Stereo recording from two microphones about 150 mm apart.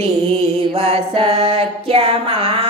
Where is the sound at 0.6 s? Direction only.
40° right (ahead or behind).